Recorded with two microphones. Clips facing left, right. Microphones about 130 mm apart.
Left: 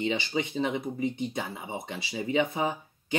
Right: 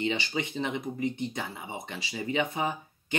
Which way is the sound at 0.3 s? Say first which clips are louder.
Left 3 dB; 15° left (ahead or behind).